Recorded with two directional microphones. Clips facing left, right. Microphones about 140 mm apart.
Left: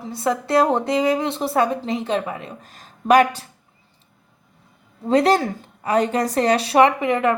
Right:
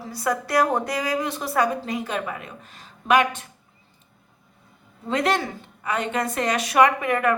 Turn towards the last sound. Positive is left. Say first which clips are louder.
# left 3 dB
turn(degrees=25)  # may be behind; listen again after turning